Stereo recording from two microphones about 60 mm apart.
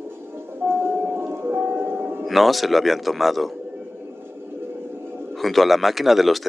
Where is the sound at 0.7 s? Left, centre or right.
Right.